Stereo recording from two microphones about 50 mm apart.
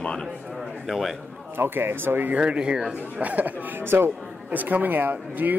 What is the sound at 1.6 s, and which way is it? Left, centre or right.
Speech, right.